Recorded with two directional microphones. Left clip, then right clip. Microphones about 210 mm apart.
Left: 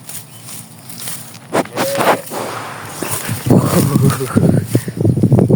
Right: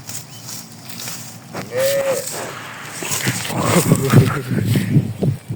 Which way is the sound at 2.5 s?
30° left (ahead or behind).